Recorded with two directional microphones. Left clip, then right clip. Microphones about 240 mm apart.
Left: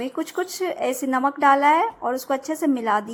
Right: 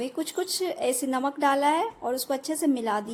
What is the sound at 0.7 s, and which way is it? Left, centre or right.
Speech, centre.